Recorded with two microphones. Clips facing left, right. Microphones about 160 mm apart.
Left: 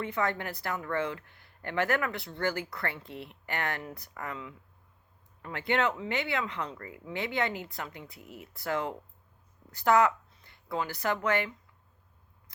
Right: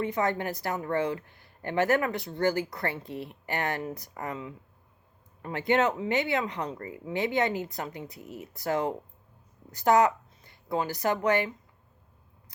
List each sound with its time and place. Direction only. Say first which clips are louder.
0.0 s speech: right 4 dB; 20° right (ahead or behind)
5.5 s speech: right 4 dB; 20° right (ahead or behind)
6.6 s speech: right 3 dB; 40° right (ahead or behind)
6.8 s speech: right 6 dB; 25° right (ahead or behind)
9.7 s a sound: right 2 dB; 20° right (ahead or behind)
11.1 s speech: right 3 dB; 15° right (ahead or behind)